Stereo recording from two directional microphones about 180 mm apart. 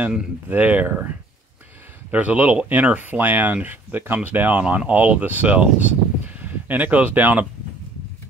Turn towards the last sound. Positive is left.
turn(degrees=-10)  # may be behind; listen again after turning